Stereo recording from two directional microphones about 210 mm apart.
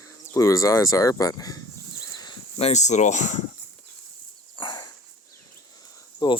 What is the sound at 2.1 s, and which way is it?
Cricket, 20° left (ahead or behind).